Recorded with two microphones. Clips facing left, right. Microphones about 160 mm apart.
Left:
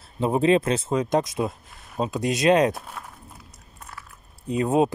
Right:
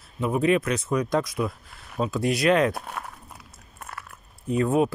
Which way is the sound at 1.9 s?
20° left (ahead or behind).